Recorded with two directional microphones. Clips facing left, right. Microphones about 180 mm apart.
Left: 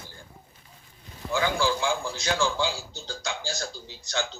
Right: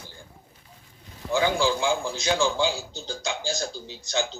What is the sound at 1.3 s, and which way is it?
A man's voice, 20° right (ahead or behind).